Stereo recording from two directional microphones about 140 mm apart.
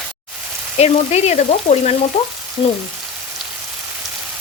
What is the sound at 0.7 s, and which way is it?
Frying, 50° left (ahead or behind).